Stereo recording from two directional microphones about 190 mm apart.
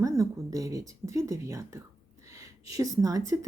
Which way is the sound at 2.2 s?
15° right (ahead or behind).